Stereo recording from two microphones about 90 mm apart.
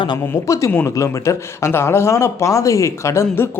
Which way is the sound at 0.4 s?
35° left (ahead or behind).